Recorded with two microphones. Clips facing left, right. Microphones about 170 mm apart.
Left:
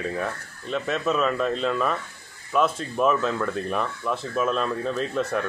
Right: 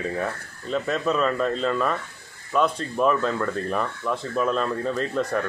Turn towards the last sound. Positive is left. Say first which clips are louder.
# right 1 dB
turn(degrees=0)  # may be behind; listen again after turning